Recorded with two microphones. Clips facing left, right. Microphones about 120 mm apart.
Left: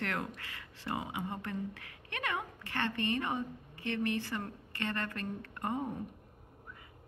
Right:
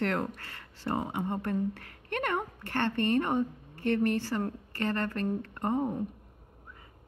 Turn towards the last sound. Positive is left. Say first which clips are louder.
# right 6 dB
turn(degrees=-30)  # may be behind; listen again after turning